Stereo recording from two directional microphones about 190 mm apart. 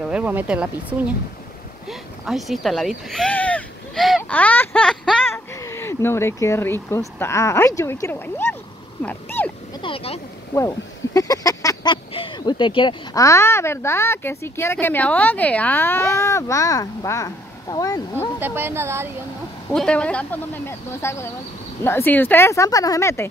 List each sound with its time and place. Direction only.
0.1 s speech: 10° right (ahead or behind)
1.9 s a sound: centre (ahead or behind)
5.2 s speech: 15° left (ahead or behind)
9.8 s speech: 30° left (ahead or behind)
11.1 s speech: 20° left (ahead or behind)
18.4 s speech: 10° right (ahead or behind)
19.7 s speech: 5° left (ahead or behind)